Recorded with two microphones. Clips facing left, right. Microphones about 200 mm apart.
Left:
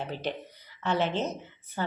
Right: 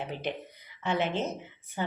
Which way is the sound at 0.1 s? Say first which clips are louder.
Left 1 dB; 35° left (ahead or behind).